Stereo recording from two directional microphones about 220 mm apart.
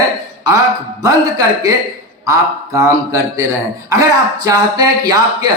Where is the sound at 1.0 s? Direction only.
15° right (ahead or behind).